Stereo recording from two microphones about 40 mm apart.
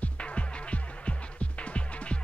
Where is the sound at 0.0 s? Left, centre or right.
Left.